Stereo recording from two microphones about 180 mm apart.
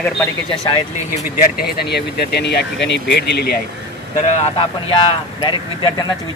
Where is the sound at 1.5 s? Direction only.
60° left (ahead or behind).